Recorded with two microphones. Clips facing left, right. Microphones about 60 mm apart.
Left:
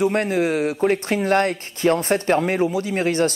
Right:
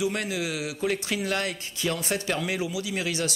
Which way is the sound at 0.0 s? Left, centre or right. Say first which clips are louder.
Left 9 dB; left.